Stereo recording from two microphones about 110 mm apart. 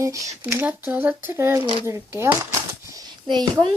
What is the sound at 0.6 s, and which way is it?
Speech, 15° right (ahead or behind).